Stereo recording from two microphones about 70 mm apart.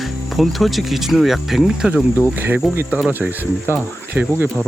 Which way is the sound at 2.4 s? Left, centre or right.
Right.